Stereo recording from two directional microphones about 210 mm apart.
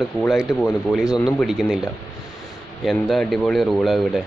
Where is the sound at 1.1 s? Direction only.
15° left (ahead or behind).